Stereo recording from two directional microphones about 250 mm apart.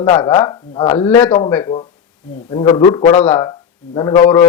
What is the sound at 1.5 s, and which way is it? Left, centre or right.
A man's voice, centre.